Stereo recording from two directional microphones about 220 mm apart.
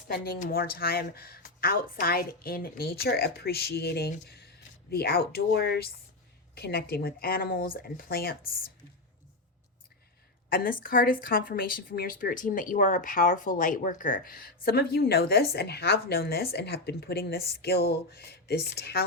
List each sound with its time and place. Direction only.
0.1 s speech: 45° left (ahead or behind)
10.5 s speech: 40° left (ahead or behind)